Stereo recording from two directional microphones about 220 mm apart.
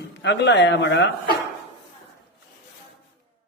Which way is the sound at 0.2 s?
50° left (ahead or behind).